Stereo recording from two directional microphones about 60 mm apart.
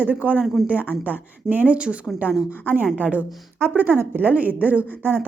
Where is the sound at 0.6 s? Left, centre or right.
Centre.